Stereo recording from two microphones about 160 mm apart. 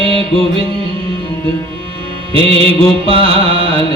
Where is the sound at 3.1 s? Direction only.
35° right (ahead or behind).